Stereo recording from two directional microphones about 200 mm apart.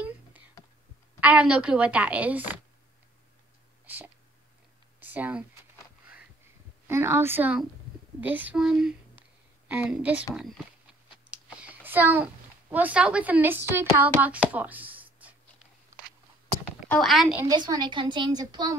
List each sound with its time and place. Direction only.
1.2 s a woman's voice: 5° right (ahead or behind)
3.8 s speech: 10° right (ahead or behind)
6.9 s a woman's voice: 10° right (ahead or behind)
11.2 s a child's voice: 5° right (ahead or behind)
16.9 s a woman's voice: centre (ahead or behind)
17.5 s a woman's voice: 20° right (ahead or behind)